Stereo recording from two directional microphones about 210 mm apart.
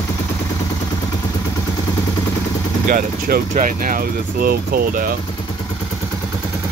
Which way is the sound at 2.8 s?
45° right (ahead or behind).